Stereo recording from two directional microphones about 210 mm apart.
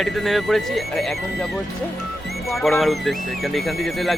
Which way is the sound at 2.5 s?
Centre (ahead or behind).